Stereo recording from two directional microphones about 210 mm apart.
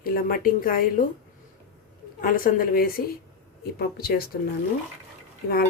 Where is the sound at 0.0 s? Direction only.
45° left (ahead or behind).